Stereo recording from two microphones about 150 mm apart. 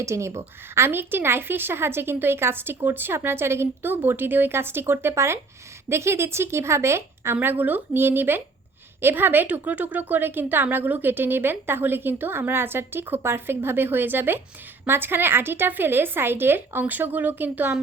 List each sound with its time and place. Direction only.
0.0 s a woman's voice: 20° right (ahead or behind)